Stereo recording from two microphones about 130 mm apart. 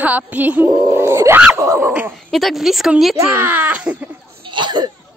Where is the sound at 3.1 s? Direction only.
25° right (ahead or behind).